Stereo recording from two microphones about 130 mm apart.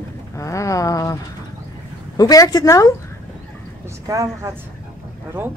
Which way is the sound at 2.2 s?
30° left (ahead or behind).